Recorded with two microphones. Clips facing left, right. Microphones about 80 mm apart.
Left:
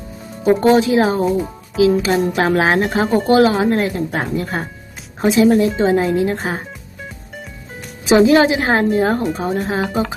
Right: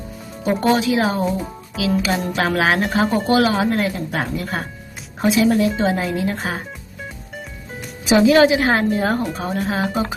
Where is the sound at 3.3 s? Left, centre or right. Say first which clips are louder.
Left 5 dB; left.